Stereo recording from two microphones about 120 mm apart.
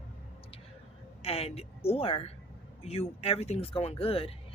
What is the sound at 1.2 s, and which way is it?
A woman's voice, 55° left (ahead or behind).